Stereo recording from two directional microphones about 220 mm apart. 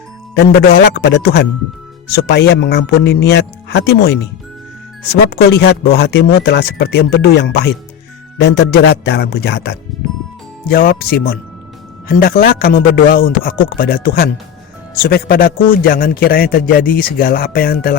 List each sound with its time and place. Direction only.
0.9 s a man's voice: 50° left (ahead or behind)
5.3 s a man's voice: 50° left (ahead or behind)
9.9 s music: centre (ahead or behind)
10.7 s a man's voice: 40° left (ahead or behind)